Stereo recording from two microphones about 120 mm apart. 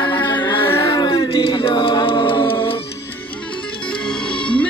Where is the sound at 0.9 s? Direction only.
40° left (ahead or behind).